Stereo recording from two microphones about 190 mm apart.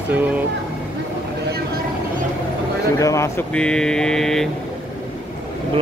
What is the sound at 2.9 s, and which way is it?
Speech, 15° left (ahead or behind).